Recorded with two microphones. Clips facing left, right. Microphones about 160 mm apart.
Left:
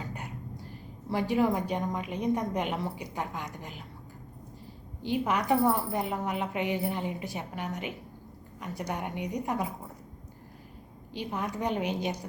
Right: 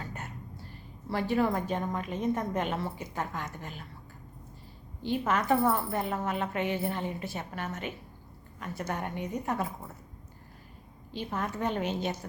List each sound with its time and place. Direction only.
0.0 s vehicle: 15° left (ahead or behind)
1.1 s a woman's voice: 15° left (ahead or behind)
5.0 s a woman's voice: 15° left (ahead or behind)
11.1 s a woman's voice: 15° left (ahead or behind)